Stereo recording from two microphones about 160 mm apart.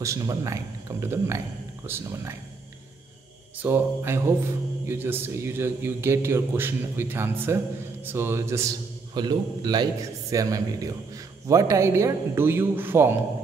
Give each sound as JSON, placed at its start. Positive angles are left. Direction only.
{"t": 0.0, "sound": "a man's voice", "side_deg": -20}
{"t": 3.6, "sound": "a man's voice", "side_deg": -15}